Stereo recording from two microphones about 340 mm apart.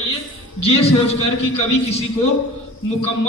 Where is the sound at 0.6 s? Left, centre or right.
Centre.